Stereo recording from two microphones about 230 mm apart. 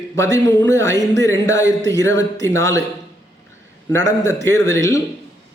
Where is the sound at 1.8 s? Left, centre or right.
Right.